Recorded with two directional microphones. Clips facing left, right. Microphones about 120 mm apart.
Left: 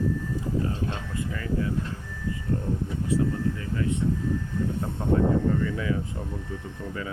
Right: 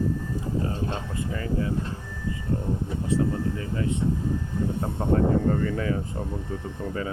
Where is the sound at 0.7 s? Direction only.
35° right (ahead or behind).